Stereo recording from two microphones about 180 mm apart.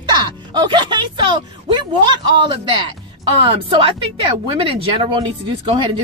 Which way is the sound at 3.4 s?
30° right (ahead or behind).